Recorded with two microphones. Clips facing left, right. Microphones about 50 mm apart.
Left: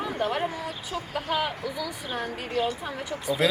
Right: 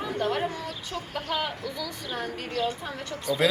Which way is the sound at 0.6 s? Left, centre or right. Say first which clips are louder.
Left 2 dB; left.